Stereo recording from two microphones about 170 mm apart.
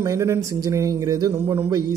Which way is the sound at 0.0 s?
15° right (ahead or behind).